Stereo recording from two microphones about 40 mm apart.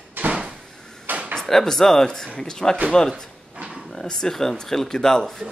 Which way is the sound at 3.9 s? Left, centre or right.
Centre.